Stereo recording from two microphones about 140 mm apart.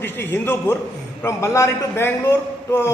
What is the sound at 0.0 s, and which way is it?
A man's voice, 15° left (ahead or behind).